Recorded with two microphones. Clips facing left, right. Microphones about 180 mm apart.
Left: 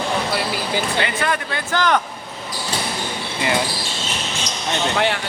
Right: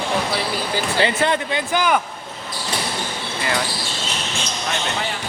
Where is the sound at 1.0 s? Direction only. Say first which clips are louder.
Right 3 dB; 25° right (ahead or behind).